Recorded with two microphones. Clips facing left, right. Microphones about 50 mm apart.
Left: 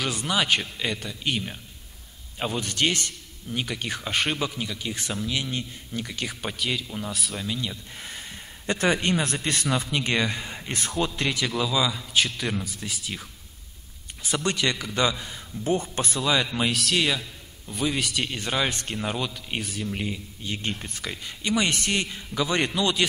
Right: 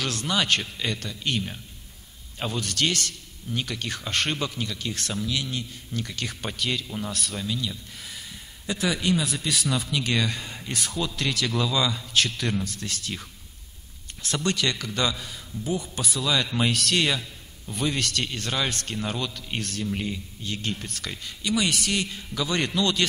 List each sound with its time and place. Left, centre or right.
0.0 s a man's voice: centre
6.0 s a man's voice: centre
7.5 s speech: centre
8.0 s a sound: left
8.6 s a man's voice: left
9.7 s speech: left
11.5 s a man's voice: centre
15.6 s a man's voice: left
16.2 s a man's voice: centre
16.4 s a man's voice: centre; by 22.0 s left
22.1 s a man's voice: centre